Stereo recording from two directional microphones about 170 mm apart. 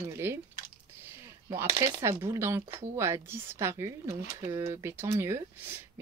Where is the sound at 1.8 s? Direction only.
15° right (ahead or behind).